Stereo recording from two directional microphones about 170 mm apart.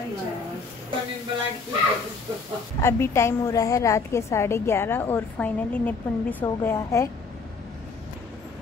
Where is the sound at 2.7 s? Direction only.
15° left (ahead or behind).